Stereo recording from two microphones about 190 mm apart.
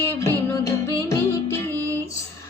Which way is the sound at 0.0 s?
20° left (ahead or behind).